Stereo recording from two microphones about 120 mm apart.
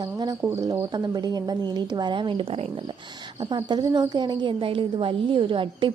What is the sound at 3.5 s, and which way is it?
A woman's voice, 40° right (ahead or behind).